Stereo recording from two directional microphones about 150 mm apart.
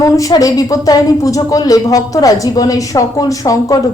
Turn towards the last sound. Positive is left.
turn(degrees=25)  # may be behind; listen again after turning